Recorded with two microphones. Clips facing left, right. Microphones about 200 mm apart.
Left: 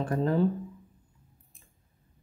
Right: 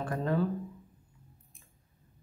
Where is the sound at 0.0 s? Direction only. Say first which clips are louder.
Left 4 dB; 30° left (ahead or behind).